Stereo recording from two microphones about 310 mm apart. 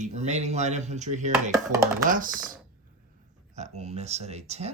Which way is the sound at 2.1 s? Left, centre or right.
Right.